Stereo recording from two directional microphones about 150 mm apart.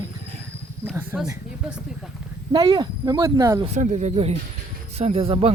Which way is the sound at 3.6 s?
50° right (ahead or behind).